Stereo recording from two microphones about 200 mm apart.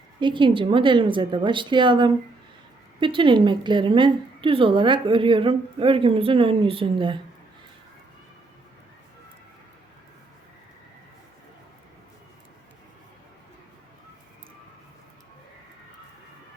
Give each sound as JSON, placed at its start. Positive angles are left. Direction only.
{"t": 0.2, "sound": "a woman's voice", "side_deg": -25}